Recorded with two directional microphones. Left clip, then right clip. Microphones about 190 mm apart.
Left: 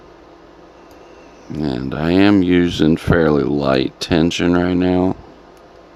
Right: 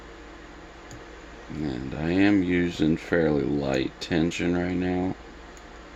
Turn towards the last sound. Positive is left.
turn(degrees=40)  # may be behind; listen again after turning